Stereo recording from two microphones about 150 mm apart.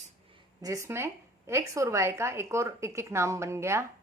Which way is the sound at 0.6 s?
20° right (ahead or behind).